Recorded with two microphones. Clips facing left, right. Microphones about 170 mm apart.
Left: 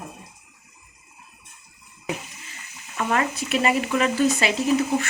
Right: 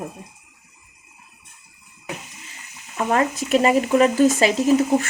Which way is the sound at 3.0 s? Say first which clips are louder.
Right 4 dB; 35° right (ahead or behind).